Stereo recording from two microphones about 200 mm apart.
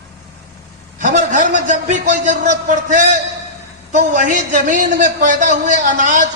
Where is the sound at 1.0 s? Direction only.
40° right (ahead or behind).